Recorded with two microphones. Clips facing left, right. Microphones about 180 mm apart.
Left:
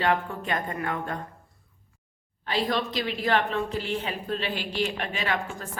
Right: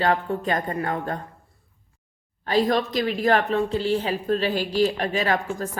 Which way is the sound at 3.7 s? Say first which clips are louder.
Right 7 dB; 35° right (ahead or behind).